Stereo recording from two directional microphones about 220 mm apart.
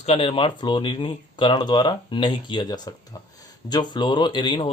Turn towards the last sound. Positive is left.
turn(degrees=20)  # may be behind; listen again after turning